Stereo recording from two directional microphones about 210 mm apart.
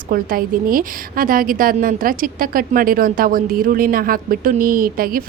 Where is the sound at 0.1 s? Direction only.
45° right (ahead or behind).